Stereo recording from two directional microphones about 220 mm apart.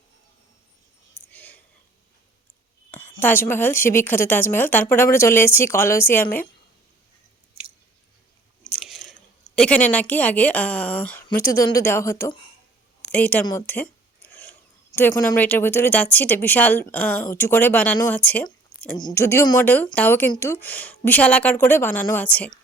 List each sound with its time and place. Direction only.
1.3 s whispering: 5° left (ahead or behind)
2.9 s a woman's voice: 10° left (ahead or behind)
8.7 s chewing: centre (ahead or behind)
9.6 s a woman's voice: 5° left (ahead or behind)
11.3 s speech: 40° left (ahead or behind)
11.9 s a woman's voice: 10° left (ahead or behind)
13.4 s a sound: 15° left (ahead or behind)
14.9 s a woman's voice: 15° left (ahead or behind)